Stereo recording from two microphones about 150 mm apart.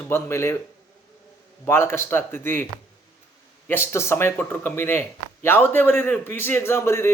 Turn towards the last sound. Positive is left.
turn(degrees=15)  # may be behind; listen again after turning